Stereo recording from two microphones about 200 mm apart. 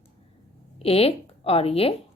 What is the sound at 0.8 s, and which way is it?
Speech, 30° left (ahead or behind).